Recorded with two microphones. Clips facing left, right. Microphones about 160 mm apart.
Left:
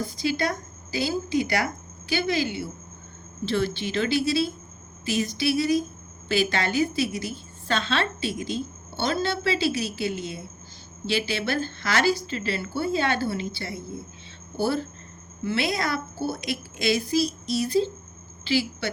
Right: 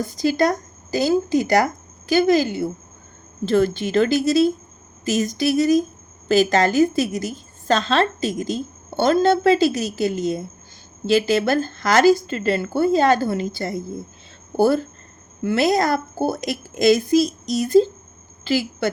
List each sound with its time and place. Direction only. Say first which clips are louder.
0.2 s a woman's voice: right 9 dB; 45° right (ahead or behind)